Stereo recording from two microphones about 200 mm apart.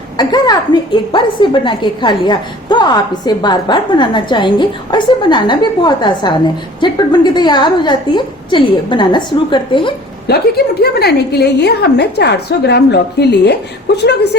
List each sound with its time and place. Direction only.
0.2 s a woman's voice: 20° left (ahead or behind)
10.2 s a woman's voice: 55° left (ahead or behind)